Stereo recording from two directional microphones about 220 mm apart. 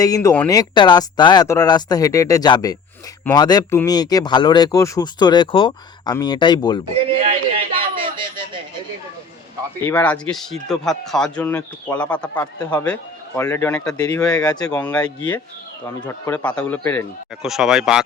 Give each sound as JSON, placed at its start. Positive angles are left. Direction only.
{"t": 0.0, "sound": "speech", "side_deg": 15}
{"t": 7.2, "sound": "a sound", "side_deg": -25}
{"t": 9.8, "sound": "speech", "side_deg": 5}
{"t": 17.4, "sound": "speech", "side_deg": 0}